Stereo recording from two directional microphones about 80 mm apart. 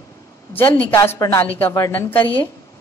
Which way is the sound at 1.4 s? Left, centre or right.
Left.